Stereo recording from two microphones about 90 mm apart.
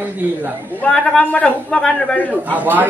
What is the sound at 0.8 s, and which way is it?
Speech, 10° left (ahead or behind).